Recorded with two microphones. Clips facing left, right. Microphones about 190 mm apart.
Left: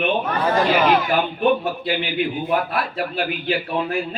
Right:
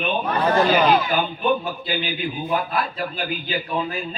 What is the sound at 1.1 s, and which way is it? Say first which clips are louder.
A man's voice: left 3 dB; 70° left (ahead or behind).